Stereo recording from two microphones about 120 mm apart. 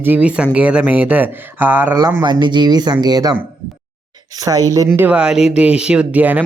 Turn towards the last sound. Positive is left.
turn(degrees=-15)  # may be behind; listen again after turning